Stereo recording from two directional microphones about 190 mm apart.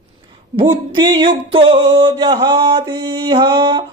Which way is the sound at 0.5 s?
25° right (ahead or behind).